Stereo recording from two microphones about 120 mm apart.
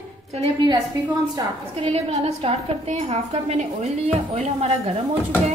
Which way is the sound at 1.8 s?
55° right (ahead or behind).